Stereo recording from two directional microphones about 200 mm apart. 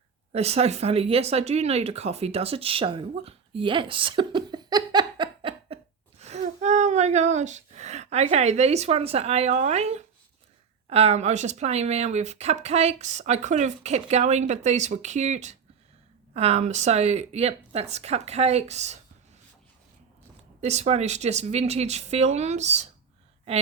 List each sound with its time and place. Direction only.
0.3 s speech: 30° right (ahead or behind)
20.6 s speech: 35° right (ahead or behind)